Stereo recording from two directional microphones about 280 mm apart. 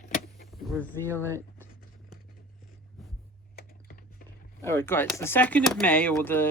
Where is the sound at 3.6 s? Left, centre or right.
Left.